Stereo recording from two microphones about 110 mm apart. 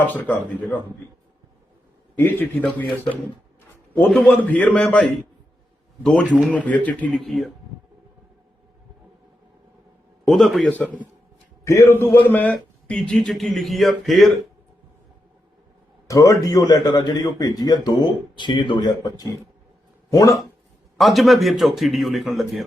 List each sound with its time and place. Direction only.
0.1 s speech: 15° left (ahead or behind)
2.1 s speech: 15° left (ahead or behind)
6.2 s a man's voice: 10° right (ahead or behind)
6.5 s a man's voice: 15° left (ahead or behind)
10.2 s a man's voice: centre (ahead or behind)
11.6 s a man's voice: 25° left (ahead or behind); by 14.3 s centre (ahead or behind)
16.1 s a man's voice: 30° left (ahead or behind)
20.1 s speech: 30° left (ahead or behind)
21.0 s a man's voice: centre (ahead or behind)